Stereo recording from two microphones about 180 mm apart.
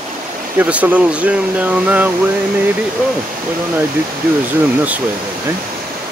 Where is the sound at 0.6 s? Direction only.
10° right (ahead or behind).